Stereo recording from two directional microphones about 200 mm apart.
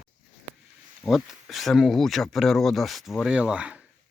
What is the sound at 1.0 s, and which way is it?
Speech, centre (ahead or behind).